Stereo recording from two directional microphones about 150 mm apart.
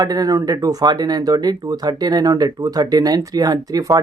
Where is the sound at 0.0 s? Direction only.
25° right (ahead or behind).